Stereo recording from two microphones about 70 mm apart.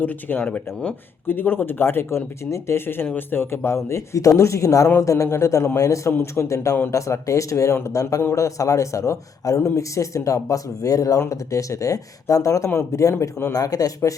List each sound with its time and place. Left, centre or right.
0.0 s speech: left
1.3 s speech: left